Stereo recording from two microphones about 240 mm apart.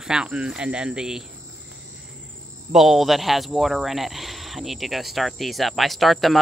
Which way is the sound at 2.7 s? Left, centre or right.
Centre.